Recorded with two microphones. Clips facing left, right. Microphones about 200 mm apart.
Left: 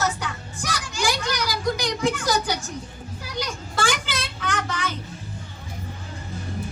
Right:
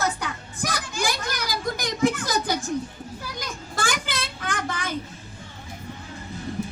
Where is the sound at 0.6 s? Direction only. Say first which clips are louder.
Left 1 dB; 55° right (ahead or behind).